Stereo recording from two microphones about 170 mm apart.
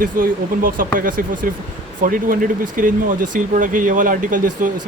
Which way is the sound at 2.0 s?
55° right (ahead or behind).